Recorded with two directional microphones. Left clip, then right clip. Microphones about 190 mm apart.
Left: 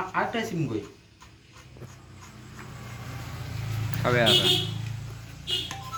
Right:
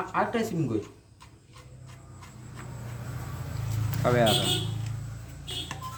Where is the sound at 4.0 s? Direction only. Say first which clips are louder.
Left 1 dB; 10° right (ahead or behind).